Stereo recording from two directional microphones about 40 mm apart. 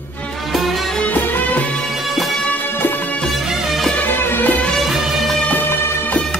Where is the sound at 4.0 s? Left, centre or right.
Left.